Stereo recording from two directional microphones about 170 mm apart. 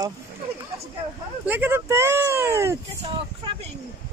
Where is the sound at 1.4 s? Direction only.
10° right (ahead or behind).